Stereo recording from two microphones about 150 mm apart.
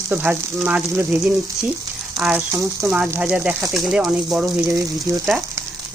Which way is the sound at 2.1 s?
5° right (ahead or behind).